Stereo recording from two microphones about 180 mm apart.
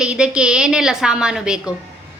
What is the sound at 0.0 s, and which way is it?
A woman's voice, 5° right (ahead or behind).